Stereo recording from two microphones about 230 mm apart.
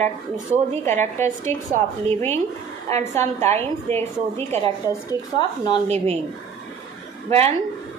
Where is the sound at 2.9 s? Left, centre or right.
Right.